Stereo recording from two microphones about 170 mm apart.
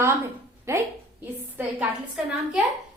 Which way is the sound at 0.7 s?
15° right (ahead or behind).